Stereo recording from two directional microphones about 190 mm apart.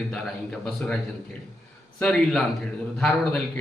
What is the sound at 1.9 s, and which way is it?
A man's voice, 5° left (ahead or behind).